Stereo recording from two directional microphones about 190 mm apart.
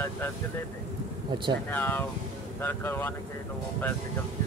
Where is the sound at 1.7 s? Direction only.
10° left (ahead or behind).